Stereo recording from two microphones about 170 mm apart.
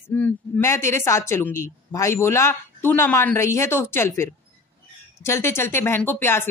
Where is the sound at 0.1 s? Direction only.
10° left (ahead or behind).